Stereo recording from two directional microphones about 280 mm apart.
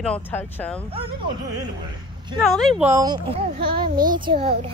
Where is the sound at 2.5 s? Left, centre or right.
Centre.